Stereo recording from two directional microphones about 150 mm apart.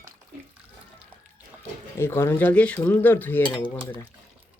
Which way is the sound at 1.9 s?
15° left (ahead or behind).